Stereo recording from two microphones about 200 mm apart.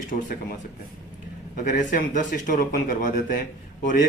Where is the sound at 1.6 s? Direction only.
40° left (ahead or behind).